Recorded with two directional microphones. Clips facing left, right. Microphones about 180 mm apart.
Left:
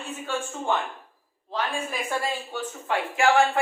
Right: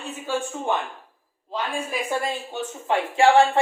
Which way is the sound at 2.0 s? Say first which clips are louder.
Right 2 dB; 25° right (ahead or behind).